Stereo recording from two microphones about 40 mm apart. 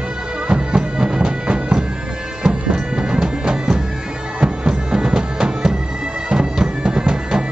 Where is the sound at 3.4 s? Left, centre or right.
Centre.